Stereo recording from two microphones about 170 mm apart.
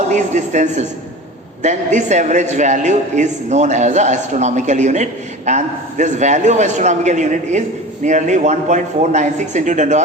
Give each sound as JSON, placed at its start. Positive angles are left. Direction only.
{"t": 0.1, "sound": "a man's voice", "side_deg": -45}